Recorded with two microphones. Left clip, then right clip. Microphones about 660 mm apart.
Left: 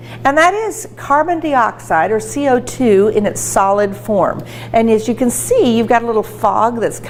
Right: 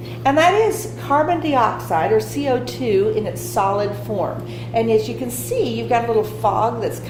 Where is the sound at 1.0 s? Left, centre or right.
Left.